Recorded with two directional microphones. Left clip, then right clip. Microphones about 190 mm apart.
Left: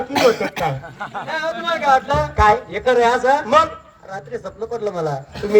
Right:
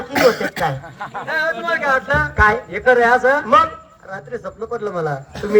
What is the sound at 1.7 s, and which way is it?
Speech, 25° left (ahead or behind).